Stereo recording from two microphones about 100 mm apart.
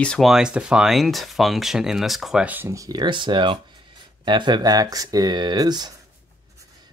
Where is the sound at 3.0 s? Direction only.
50° right (ahead or behind).